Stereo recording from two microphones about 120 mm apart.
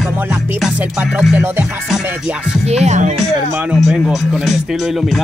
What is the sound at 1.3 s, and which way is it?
Music, 15° right (ahead or behind).